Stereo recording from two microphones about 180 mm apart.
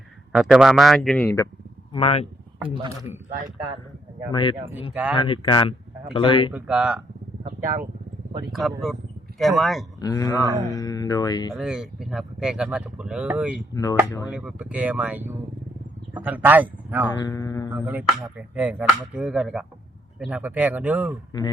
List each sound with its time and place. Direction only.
0.3 s speech: centre (ahead or behind)
1.9 s speech: 30° left (ahead or behind)
2.6 s a man's voice: 25° right (ahead or behind)
4.3 s speech: 25° left (ahead or behind)
6.5 s finger snapping: 5° right (ahead or behind)
8.5 s speech: centre (ahead or behind)
10.0 s speech: 20° left (ahead or behind)
10.4 s a man's voice: 20° right (ahead or behind)
10.7 s speech: 20° left (ahead or behind)
11.5 s speech: centre (ahead or behind)
13.7 s speech: 20° left (ahead or behind)
14.3 s finger snapping: 5° right (ahead or behind)
17.1 s speech: 20° left (ahead or behind)
17.7 s finger snapping: 10° right (ahead or behind)